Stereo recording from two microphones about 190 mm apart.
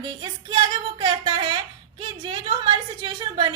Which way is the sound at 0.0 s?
25° right (ahead or behind).